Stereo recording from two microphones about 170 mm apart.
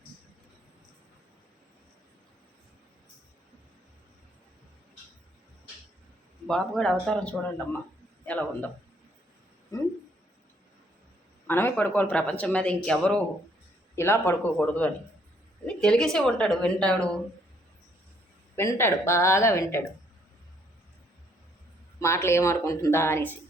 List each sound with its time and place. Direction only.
6.5 s a woman's voice: 5° left (ahead or behind)
9.7 s a sound: 20° left (ahead or behind)
11.4 s a woman's voice: 10° left (ahead or behind)
18.5 s speech: 15° left (ahead or behind)
22.0 s speech: 15° left (ahead or behind)